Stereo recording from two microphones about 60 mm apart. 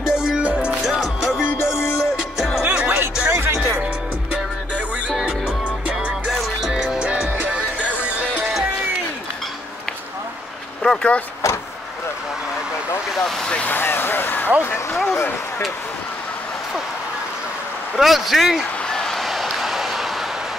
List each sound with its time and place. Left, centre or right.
0.0 s music: centre
0.4 s music: right
0.8 s music: centre
1.7 s music: centre
2.7 s music: right
3.3 s music: right
6.3 s music: centre
10.8 s a sound: centre
11.4 s vehicle: left
13.2 s speech: centre
13.7 s a sound: left
14.6 s speech: left
17.9 s speech: centre
18.9 s a sound: centre